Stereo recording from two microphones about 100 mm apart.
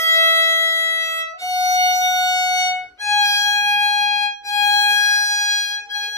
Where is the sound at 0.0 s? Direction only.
30° left (ahead or behind).